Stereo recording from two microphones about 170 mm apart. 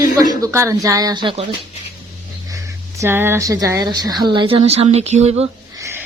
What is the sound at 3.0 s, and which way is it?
Speech, 15° right (ahead or behind).